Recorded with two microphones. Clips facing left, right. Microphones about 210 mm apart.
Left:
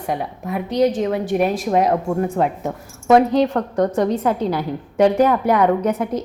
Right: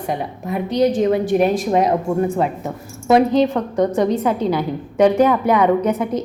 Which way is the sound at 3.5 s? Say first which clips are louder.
Right 1 dB; 10° right (ahead or behind).